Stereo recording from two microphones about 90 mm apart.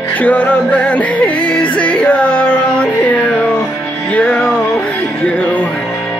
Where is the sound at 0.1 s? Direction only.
15° left (ahead or behind).